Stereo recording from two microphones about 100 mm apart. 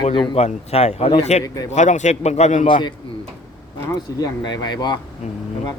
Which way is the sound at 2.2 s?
60° left (ahead or behind).